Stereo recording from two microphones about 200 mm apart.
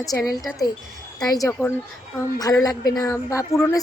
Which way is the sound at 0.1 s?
15° left (ahead or behind).